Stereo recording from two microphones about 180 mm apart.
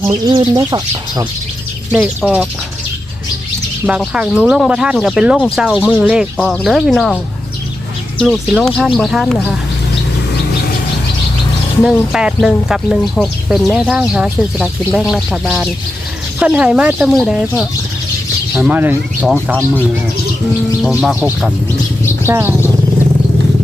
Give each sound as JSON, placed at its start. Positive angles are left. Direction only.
{"t": 0.1, "sound": "speech", "side_deg": -25}
{"t": 1.9, "sound": "speech", "side_deg": -10}
{"t": 3.8, "sound": "speech", "side_deg": -5}
{"t": 8.2, "sound": "speech", "side_deg": 0}
{"t": 11.8, "sound": "speech", "side_deg": -5}
{"t": 20.8, "sound": "speech", "side_deg": -5}